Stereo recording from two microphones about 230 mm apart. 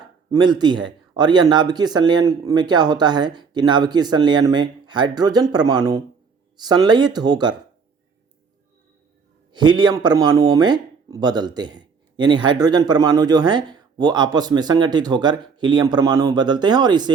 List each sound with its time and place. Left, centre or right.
0.3 s a man's voice: centre
9.5 s speech: centre